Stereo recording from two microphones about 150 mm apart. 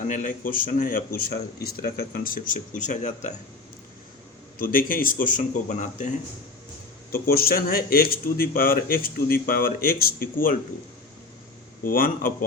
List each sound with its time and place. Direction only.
0.1 s speech: 60° left (ahead or behind)
4.5 s speech: 70° left (ahead or behind); by 6.1 s 55° left (ahead or behind)
7.1 s speech: 85° left
11.8 s speech: 70° left (ahead or behind)